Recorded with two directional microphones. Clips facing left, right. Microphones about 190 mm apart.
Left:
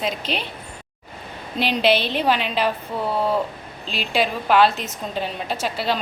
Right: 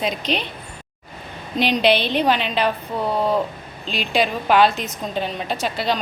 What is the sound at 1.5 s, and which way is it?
A woman's voice, 5° left (ahead or behind).